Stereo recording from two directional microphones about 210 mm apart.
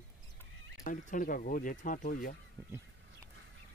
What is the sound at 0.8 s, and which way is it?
Speech, 40° left (ahead or behind).